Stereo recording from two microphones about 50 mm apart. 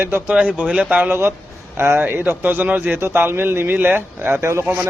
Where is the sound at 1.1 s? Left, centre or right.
Right.